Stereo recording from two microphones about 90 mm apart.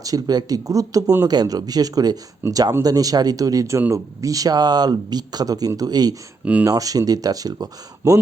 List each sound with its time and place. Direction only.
0.0 s speech: 40° right (ahead or behind)
6.4 s speech: 15° right (ahead or behind)
6.7 s speech: 40° right (ahead or behind)